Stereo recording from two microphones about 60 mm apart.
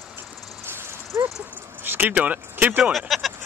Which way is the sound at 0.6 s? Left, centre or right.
Right.